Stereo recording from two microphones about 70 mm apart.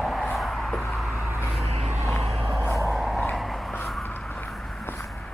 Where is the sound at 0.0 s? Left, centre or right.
Centre.